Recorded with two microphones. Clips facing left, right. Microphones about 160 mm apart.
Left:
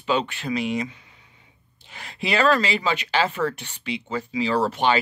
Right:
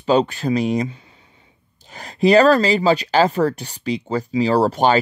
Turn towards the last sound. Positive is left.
turn(degrees=-40)  # may be behind; listen again after turning